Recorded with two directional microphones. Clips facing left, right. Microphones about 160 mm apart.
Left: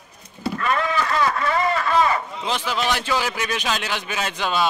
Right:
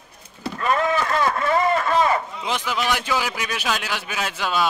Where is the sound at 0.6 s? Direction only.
40° right (ahead or behind).